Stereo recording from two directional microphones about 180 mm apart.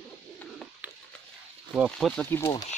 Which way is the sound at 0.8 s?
10° right (ahead or behind).